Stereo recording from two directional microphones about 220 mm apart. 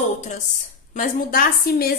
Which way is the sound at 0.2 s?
35° left (ahead or behind).